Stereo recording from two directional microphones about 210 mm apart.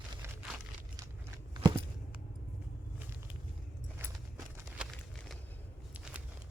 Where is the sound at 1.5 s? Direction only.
20° right (ahead or behind).